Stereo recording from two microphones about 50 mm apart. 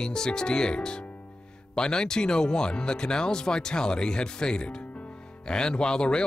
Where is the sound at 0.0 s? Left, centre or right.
Centre.